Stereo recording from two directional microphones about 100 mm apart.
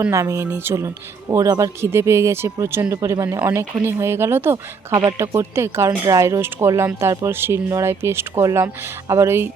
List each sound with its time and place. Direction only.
0.1 s speech: 30° right (ahead or behind)